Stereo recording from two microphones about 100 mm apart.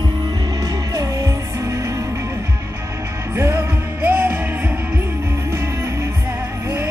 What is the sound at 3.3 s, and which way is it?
Music, 25° right (ahead or behind).